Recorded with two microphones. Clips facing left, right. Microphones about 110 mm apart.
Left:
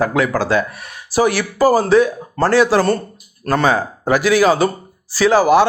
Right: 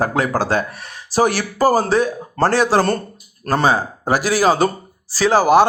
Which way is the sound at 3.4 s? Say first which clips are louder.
Left 1 dB; 35° right (ahead or behind).